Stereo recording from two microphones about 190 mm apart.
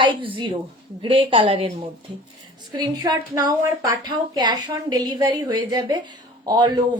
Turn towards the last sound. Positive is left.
turn(degrees=-25)  # may be behind; listen again after turning